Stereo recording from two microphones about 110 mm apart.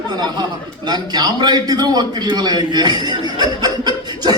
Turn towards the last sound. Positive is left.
turn(degrees=-40)  # may be behind; listen again after turning